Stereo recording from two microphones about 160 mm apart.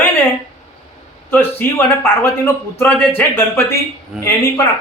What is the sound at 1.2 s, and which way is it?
A man's voice, 15° left (ahead or behind).